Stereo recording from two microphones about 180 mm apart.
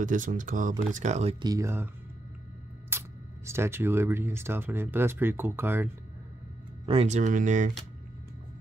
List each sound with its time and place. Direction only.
0.0 s speech: 45° right (ahead or behind)
1.4 s speech: 20° right (ahead or behind)
2.9 s a sound: 15° right (ahead or behind)
3.4 s speech: 15° right (ahead or behind)
6.9 s speech: 35° right (ahead or behind)